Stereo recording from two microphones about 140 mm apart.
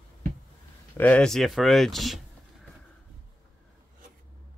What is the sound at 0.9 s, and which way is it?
Speech, 10° left (ahead or behind).